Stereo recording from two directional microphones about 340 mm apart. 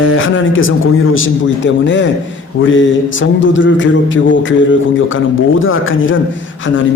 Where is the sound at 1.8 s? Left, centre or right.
Left.